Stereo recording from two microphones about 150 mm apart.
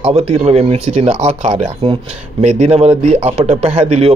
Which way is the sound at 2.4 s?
50° right (ahead or behind).